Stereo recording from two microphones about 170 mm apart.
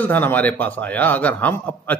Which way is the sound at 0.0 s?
10° left (ahead or behind).